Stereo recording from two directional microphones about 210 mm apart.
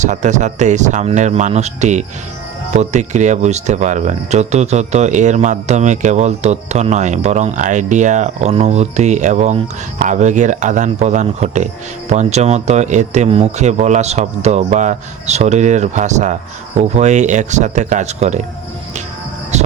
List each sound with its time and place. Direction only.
0.0 s speech: 35° right (ahead or behind)